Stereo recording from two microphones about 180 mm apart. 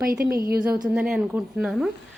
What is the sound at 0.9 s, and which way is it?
Speech, 5° right (ahead or behind).